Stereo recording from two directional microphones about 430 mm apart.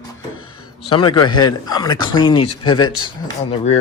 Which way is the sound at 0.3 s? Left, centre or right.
Left.